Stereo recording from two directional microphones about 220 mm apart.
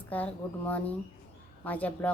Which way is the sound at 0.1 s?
5° left (ahead or behind).